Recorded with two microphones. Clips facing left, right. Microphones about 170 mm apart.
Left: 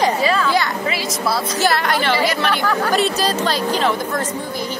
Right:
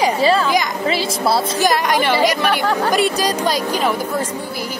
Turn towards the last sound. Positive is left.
turn(degrees=-10)  # may be behind; listen again after turning